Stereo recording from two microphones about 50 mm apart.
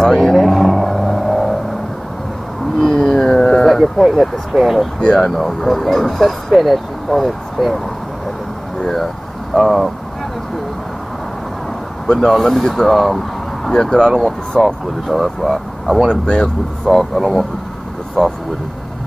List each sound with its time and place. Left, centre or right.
0.0 s vehicle: centre
2.8 s a sound: centre
5.0 s speech: centre
8.9 s speech: centre
12.3 s speech: centre
16.1 s speech: centre
16.9 s speech: centre